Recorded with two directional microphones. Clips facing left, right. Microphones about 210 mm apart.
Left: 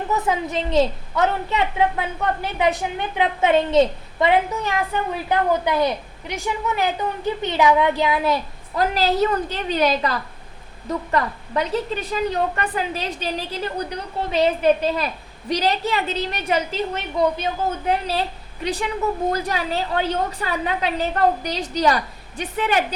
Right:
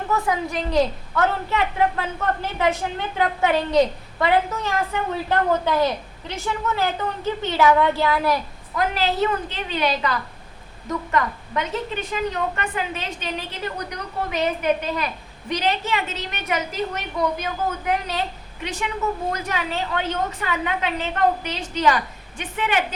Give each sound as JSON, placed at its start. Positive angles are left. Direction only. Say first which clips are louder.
{"t": 0.1, "sound": "a woman's voice", "louder": "even", "side_deg": 20}
{"t": 8.8, "sound": "a woman's voice", "louder": "left 3 dB", "side_deg": 40}